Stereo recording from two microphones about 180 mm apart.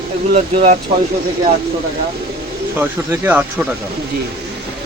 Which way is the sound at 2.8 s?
10° right (ahead or behind).